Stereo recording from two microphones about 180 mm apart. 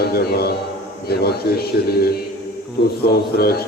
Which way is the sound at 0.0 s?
60° left (ahead or behind).